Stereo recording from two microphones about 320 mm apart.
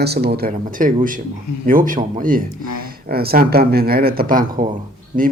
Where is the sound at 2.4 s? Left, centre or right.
Left.